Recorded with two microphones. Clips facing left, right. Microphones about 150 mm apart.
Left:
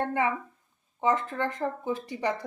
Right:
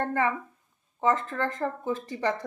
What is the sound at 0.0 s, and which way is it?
A woman's voice, 15° left (ahead or behind).